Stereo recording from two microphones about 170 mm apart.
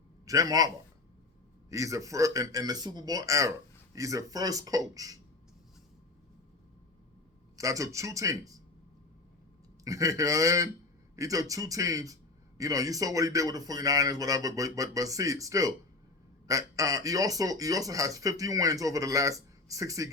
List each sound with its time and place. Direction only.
0.3 s speech: 20° right (ahead or behind)
1.7 s speech: 20° right (ahead or behind)
7.5 s speech: 20° right (ahead or behind)
9.8 s speech: 20° right (ahead or behind)